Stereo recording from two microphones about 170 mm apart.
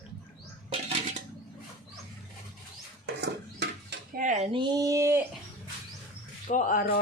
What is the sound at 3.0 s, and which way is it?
Dishes, 85° right.